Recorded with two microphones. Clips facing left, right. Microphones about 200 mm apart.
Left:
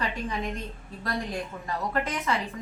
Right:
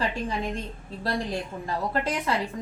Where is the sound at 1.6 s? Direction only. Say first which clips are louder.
Right 2 dB; 30° right (ahead or behind).